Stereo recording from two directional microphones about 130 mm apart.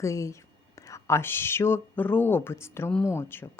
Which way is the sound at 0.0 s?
25° left (ahead or behind).